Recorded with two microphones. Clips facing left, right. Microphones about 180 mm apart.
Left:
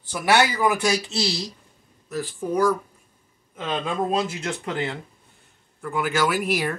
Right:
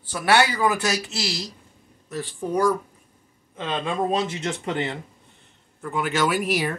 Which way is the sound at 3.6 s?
10° left (ahead or behind).